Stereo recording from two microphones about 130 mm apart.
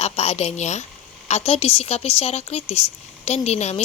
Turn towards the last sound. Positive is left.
turn(degrees=55)  # may be behind; listen again after turning